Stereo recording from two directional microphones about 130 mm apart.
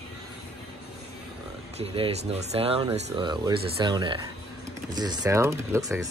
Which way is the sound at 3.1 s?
35° right (ahead or behind).